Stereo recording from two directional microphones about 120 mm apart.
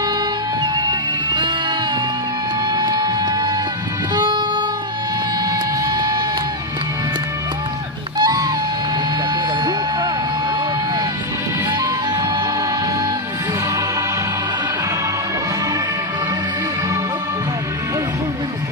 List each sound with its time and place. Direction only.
0.6 s music: 40° right (ahead or behind)
2.7 s music: 35° right (ahead or behind)
5.5 s a sound: 30° right (ahead or behind)
8.2 s wail: 35° right (ahead or behind)
11.7 s music: 35° right (ahead or behind)